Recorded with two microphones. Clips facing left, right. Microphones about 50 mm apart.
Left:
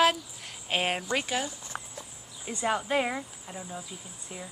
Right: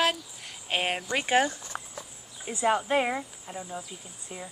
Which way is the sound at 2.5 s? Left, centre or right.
Centre.